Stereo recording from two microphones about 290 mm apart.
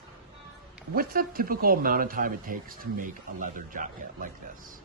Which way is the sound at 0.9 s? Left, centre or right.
Right.